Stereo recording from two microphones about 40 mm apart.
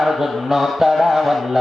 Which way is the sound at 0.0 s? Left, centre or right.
Centre.